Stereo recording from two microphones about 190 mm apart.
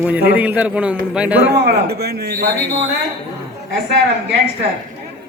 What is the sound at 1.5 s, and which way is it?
Speech, 60° right (ahead or behind).